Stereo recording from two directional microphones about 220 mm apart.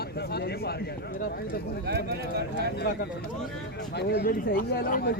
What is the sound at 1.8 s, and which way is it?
Speech, 45° right (ahead or behind).